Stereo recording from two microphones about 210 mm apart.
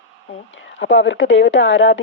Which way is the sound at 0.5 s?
65° left (ahead or behind).